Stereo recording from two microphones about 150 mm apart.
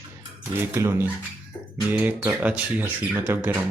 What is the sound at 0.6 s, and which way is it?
Speech, 15° right (ahead or behind).